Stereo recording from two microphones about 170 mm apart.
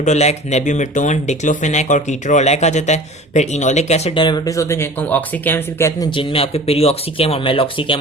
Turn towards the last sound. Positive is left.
turn(degrees=30)  # may be behind; listen again after turning